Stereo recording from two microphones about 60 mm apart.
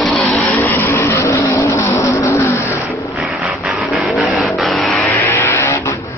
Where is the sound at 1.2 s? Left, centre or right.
Left.